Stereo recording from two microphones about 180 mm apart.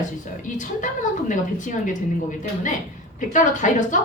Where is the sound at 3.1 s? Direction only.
45° left (ahead or behind).